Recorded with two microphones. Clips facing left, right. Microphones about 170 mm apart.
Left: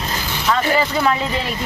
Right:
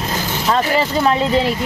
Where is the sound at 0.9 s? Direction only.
30° right (ahead or behind).